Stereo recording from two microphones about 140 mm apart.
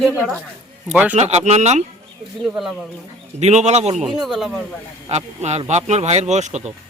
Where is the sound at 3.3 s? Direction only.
55° right (ahead or behind).